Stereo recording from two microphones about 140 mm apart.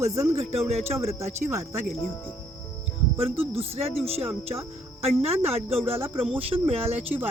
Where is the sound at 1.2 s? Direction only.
50° right (ahead or behind).